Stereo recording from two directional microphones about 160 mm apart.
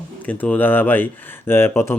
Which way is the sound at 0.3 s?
10° left (ahead or behind).